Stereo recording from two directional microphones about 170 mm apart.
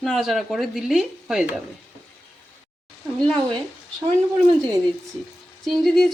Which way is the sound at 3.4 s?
25° right (ahead or behind).